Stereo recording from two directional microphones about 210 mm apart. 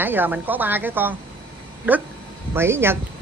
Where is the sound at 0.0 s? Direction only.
10° right (ahead or behind).